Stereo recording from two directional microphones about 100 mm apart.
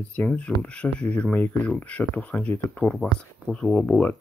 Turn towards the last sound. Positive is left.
turn(degrees=10)  # may be behind; listen again after turning